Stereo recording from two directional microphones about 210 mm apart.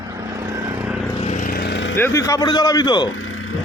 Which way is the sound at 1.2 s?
35° left (ahead or behind).